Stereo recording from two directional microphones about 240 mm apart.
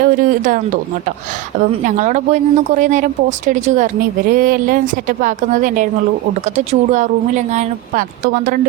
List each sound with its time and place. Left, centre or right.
0.0 s speech: right
1.8 s speech: right